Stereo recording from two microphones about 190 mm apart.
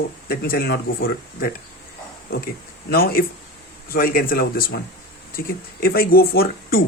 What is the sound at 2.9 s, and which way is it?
Speech, 50° left (ahead or behind).